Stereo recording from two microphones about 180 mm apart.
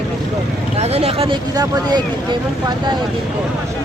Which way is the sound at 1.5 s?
20° right (ahead or behind).